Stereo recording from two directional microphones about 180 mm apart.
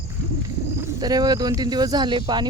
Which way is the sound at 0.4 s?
20° right (ahead or behind).